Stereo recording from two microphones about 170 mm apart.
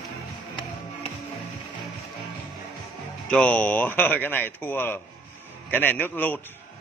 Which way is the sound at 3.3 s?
5° left (ahead or behind).